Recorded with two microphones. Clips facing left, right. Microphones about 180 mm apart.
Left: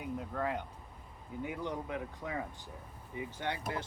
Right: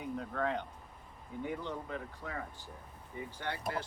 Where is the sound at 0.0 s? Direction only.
5° left (ahead or behind).